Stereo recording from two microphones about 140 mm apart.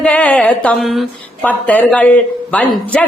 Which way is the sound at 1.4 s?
10° left (ahead or behind).